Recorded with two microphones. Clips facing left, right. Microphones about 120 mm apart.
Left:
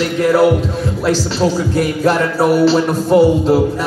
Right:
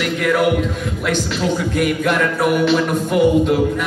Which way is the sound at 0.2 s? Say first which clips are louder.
Left 5 dB; 30° left (ahead or behind).